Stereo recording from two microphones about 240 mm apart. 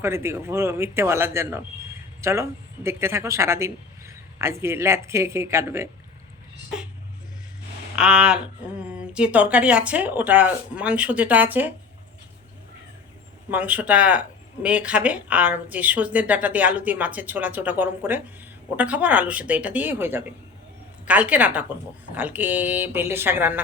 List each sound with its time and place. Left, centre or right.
0.0 s speech: centre
7.9 s speech: centre
13.5 s speech: centre